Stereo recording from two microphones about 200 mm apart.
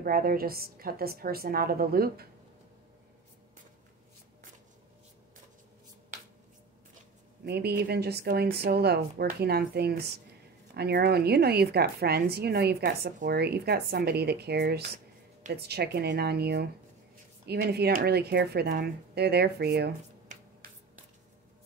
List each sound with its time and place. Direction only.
0.0 s a woman's voice: 45° right (ahead or behind)
7.4 s a woman's voice: 55° right (ahead or behind)
20.3 s finger snapping: 40° right (ahead or behind)